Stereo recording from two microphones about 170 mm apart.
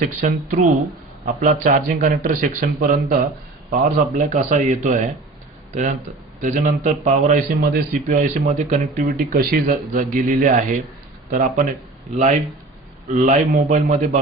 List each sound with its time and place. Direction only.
0.0 s a man's voice: 50° right (ahead or behind)
6.4 s a man's voice: 50° right (ahead or behind)
13.1 s a man's voice: 45° right (ahead or behind)